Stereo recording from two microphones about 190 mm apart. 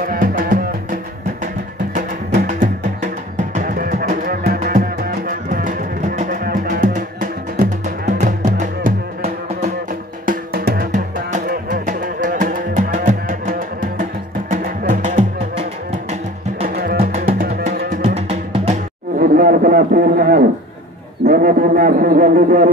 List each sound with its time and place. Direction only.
0.0 s music: 50° right (ahead or behind)
2.0 s music: 45° right (ahead or behind)
17.0 s music: 50° right (ahead or behind)
18.0 s music: 30° right (ahead or behind)
19.3 s a sound: 50° right (ahead or behind)